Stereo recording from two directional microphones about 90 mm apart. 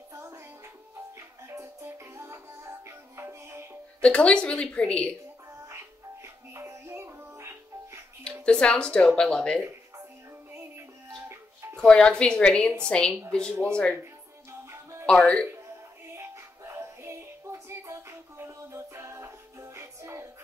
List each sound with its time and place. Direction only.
0.1 s music: 35° right (ahead or behind)
4.0 s a woman's voice: 10° left (ahead or behind)
5.5 s music: 30° right (ahead or behind)
8.5 s a woman's voice: 10° left (ahead or behind)
10.5 s music: 30° right (ahead or behind)
11.7 s a woman's voice: 10° left (ahead or behind)
14.5 s music: 30° right (ahead or behind)
15.0 s a woman's voice: 10° left (ahead or behind)
16.1 s music: 30° right (ahead or behind)